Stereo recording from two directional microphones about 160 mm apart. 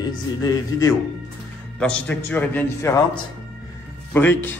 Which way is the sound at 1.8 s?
5° left (ahead or behind).